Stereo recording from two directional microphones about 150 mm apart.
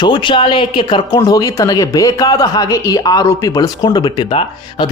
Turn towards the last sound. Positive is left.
turn(degrees=35)  # may be behind; listen again after turning